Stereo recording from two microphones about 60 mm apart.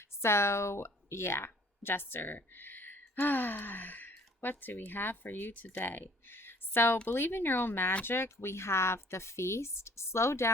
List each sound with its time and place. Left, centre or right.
0.2 s speech: left